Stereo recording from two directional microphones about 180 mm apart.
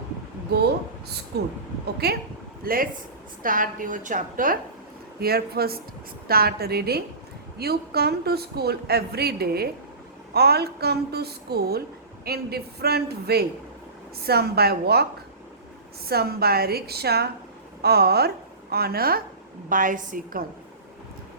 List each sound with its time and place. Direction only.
0.5 s a woman's voice: 65° right (ahead or behind)
2.0 s a woman's voice: 60° right (ahead or behind)
5.2 s a woman's voice: 60° right (ahead or behind)
16.0 s a woman's voice: 60° right (ahead or behind)